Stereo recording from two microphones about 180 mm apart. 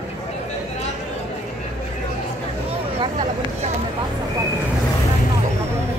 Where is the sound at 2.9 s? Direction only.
40° right (ahead or behind).